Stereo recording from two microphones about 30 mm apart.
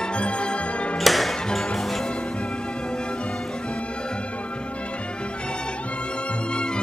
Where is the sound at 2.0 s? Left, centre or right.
Left.